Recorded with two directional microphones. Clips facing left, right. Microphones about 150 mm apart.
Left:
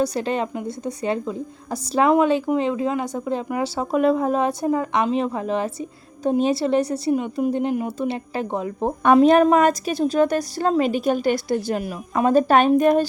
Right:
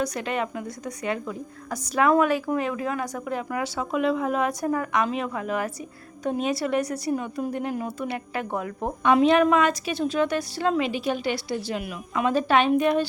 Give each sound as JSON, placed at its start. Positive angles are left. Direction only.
{"t": 0.0, "sound": "a woman's voice", "side_deg": 30}
{"t": 9.1, "sound": "a woman's voice", "side_deg": 40}